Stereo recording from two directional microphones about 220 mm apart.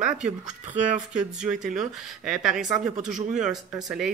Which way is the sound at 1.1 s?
5° right (ahead or behind).